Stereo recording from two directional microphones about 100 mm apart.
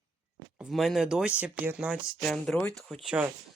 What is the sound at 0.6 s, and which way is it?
Speech, centre (ahead or behind).